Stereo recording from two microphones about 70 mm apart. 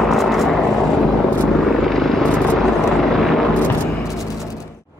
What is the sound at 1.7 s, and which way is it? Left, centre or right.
Helicopter, centre.